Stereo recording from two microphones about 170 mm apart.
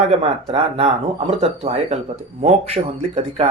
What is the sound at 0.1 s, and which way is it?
Speech, 40° right (ahead or behind).